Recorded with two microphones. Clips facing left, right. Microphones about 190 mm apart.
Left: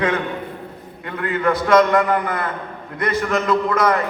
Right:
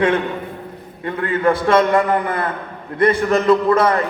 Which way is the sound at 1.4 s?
30° right (ahead or behind).